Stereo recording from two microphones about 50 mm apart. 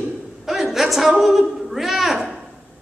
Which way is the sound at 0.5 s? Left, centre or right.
Centre.